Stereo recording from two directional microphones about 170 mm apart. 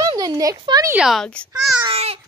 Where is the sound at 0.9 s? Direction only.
5° right (ahead or behind).